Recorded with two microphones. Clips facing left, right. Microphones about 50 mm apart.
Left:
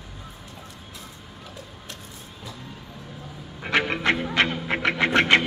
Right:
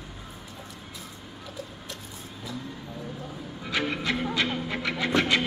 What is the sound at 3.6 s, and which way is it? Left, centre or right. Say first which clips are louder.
Music: left 5 dB; left.